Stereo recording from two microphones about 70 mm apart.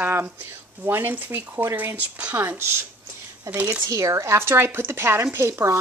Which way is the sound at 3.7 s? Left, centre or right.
Right.